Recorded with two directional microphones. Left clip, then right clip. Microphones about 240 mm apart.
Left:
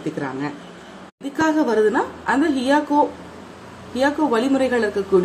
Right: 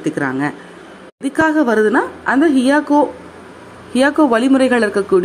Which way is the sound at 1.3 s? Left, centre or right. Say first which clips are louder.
Right 5 dB; right.